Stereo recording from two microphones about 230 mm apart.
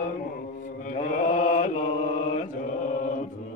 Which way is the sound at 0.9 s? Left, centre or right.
Left.